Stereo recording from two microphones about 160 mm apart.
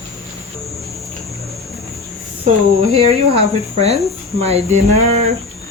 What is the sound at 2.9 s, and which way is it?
Speech, 40° right (ahead or behind).